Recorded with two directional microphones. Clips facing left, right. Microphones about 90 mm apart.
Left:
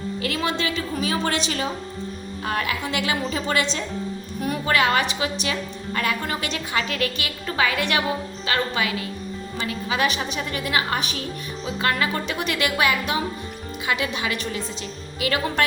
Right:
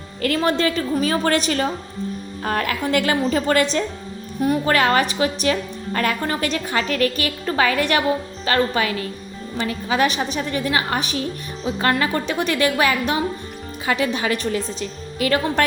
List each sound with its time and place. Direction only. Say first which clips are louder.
0.2 s a woman's voice: right 7 dB; 45° right (ahead or behind)